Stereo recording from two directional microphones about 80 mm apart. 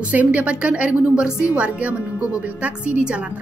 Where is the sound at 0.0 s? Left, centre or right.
Centre.